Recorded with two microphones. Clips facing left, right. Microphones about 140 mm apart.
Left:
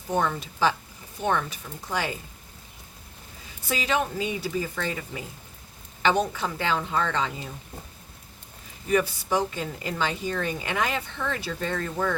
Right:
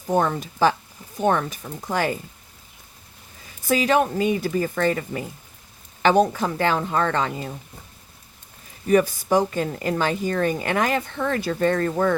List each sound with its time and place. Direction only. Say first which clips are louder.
0.2 s a woman's voice: right 4 dB; 45° right (ahead or behind)
3.7 s a woman's voice: right 7 dB; 45° right (ahead or behind)
8.9 s a woman's voice: right 6 dB; 45° right (ahead or behind)